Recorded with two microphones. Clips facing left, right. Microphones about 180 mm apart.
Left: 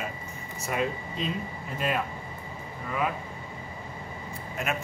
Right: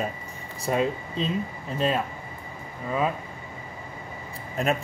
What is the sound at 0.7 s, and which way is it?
Speech, 30° right (ahead or behind).